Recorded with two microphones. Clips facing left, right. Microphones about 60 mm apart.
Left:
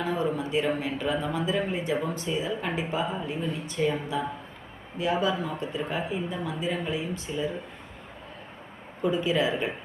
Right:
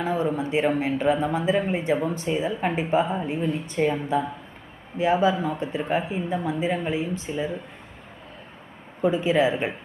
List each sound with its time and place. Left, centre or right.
0.0 s a sound: right
0.8 s speech: right
4.9 s speech: right
9.0 s speech: right